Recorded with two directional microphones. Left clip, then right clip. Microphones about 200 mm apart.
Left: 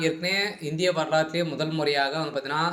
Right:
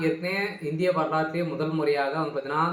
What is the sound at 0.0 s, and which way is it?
A man's voice, 40° left (ahead or behind).